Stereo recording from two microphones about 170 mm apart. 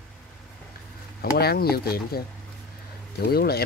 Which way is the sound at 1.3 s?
65° left (ahead or behind).